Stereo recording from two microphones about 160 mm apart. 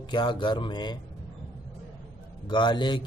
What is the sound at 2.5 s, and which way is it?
Speech, 30° left (ahead or behind).